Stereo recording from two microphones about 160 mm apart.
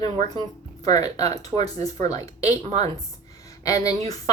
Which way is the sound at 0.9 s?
25° left (ahead or behind).